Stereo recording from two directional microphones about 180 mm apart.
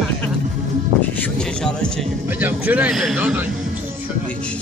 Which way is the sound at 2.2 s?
10° right (ahead or behind).